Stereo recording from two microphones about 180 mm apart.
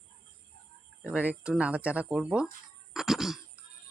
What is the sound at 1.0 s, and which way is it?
Speech, 10° right (ahead or behind).